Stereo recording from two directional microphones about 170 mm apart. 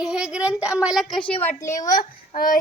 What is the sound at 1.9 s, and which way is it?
Speech, 55° left (ahead or behind).